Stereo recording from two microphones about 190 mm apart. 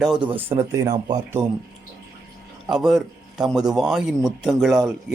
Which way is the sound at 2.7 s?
Centre (ahead or behind).